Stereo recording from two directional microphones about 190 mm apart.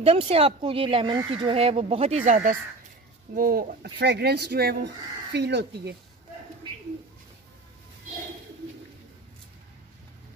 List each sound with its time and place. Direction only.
0.0 s speech: 30° right (ahead or behind)
3.3 s speech: 50° right (ahead or behind)